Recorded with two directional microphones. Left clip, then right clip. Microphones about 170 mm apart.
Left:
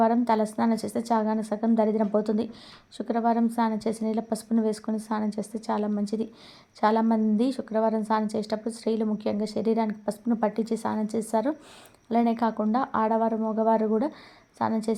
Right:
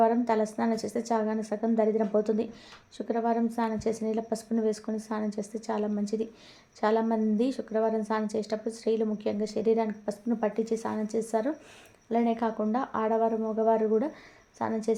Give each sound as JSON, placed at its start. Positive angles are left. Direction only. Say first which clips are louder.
{"t": 0.0, "sound": "a woman's voice", "louder": "left 2 dB", "side_deg": 30}